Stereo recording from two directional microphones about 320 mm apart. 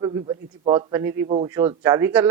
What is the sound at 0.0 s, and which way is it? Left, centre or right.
A man's voice, centre.